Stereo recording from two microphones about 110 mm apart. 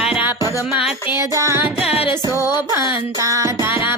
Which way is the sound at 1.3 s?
25° right (ahead or behind).